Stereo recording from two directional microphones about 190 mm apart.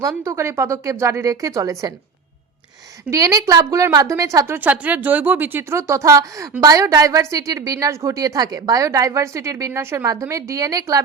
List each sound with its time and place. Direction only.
0.2 s a woman's voice: 15° right (ahead or behind)
3.1 s a woman's voice: 15° right (ahead or behind)